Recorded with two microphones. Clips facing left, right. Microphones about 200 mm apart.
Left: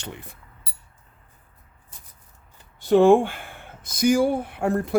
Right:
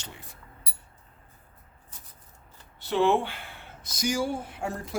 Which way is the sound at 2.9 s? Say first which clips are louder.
Left 9 dB; 45° left (ahead or behind).